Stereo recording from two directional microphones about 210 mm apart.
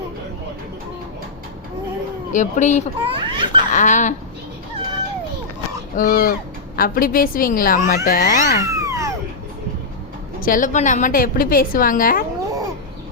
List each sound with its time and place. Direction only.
2.3 s speech: 35° left (ahead or behind)
3.0 s a child's voice: 25° right (ahead or behind)
3.7 s speech: 35° left (ahead or behind)
6.0 s speech: 45° left (ahead or behind)
8.6 s a sound: 15° right (ahead or behind)
10.4 s speech: 40° left (ahead or behind)